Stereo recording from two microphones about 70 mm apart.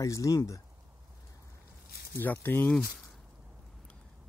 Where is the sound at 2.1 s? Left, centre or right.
Left.